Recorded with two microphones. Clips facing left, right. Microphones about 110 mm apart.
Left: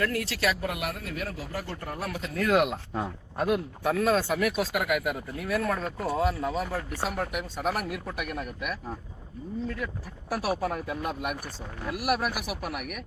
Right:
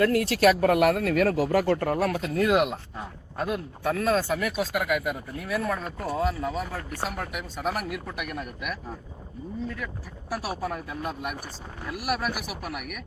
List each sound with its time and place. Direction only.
0.0 s speech: 35° right (ahead or behind)
0.3 s speech: 50° right (ahead or behind)
2.4 s speech: 5° right (ahead or behind)
3.3 s speech: 5° left (ahead or behind)
10.3 s speech: centre (ahead or behind)